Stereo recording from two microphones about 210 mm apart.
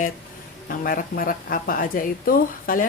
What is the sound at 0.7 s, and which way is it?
A woman's voice, 45° left (ahead or behind).